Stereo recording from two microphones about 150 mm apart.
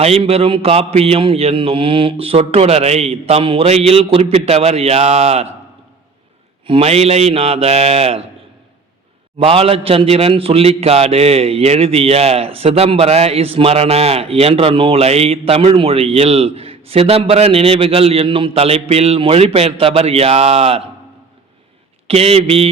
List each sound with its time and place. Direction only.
0.0 s a man's voice: 40° right (ahead or behind)
6.7 s a man's voice: 40° right (ahead or behind)
9.4 s a man's voice: 40° right (ahead or behind)
22.0 s a man's voice: 40° right (ahead or behind)